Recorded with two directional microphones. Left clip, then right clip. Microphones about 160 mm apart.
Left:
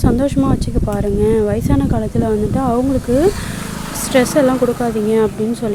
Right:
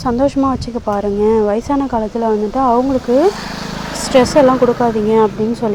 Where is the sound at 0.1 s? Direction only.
20° left (ahead or behind).